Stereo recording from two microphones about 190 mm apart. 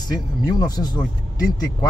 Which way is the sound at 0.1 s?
20° left (ahead or behind).